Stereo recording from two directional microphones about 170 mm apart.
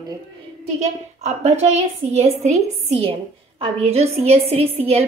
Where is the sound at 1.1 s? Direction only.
40° right (ahead or behind).